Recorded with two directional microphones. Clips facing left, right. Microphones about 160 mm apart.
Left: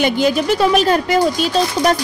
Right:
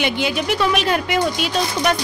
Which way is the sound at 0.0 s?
40° left (ahead or behind).